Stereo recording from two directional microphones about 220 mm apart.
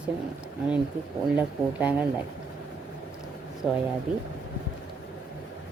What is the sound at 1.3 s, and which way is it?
Speech, 5° right (ahead or behind).